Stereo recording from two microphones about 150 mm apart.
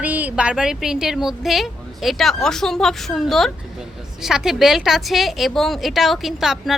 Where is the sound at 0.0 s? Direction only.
10° right (ahead or behind).